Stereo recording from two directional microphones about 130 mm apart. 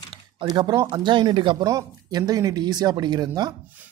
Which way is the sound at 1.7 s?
30° right (ahead or behind).